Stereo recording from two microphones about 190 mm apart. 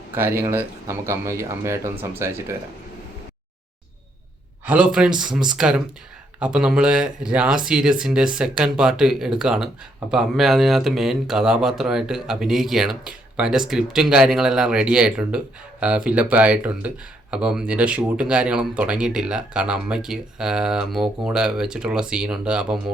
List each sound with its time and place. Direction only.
0.1 s speech: 15° right (ahead or behind)
4.6 s speech: 5° right (ahead or behind)